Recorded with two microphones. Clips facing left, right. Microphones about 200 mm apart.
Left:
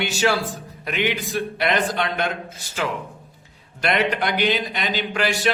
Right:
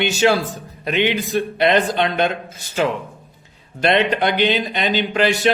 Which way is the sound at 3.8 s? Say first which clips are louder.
Right 5 dB; 25° right (ahead or behind).